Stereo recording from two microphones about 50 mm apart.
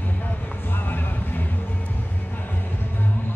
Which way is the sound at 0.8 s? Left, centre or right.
Left.